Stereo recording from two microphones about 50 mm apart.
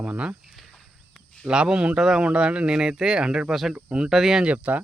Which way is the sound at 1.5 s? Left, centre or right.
Centre.